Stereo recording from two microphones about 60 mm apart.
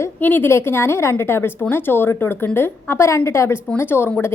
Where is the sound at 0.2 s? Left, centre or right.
Left.